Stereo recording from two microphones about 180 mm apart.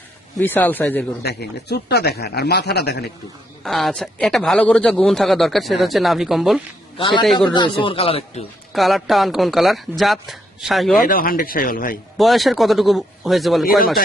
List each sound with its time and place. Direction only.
0.3 s speech: 10° left (ahead or behind)
1.2 s speech: 65° left (ahead or behind)
3.6 s a man's voice: centre (ahead or behind)
6.9 s a man's voice: 25° left (ahead or behind)
8.7 s a man's voice: centre (ahead or behind)
11.0 s speech: 50° left (ahead or behind)
12.1 s a man's voice: centre (ahead or behind)